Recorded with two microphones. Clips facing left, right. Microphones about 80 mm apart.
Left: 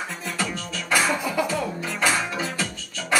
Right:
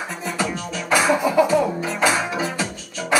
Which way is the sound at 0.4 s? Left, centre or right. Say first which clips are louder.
Right 4 dB; centre.